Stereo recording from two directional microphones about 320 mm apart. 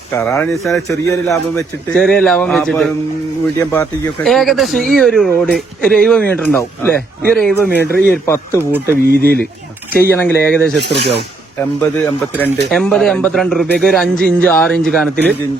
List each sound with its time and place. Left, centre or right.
0.1 s speech: centre
8.5 s speech: centre
9.2 s speech: right
10.2 s speech: centre
10.8 s speech: right
11.8 s speech: centre